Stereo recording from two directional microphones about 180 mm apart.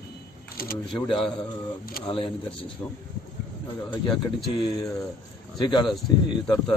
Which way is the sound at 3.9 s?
25° left (ahead or behind).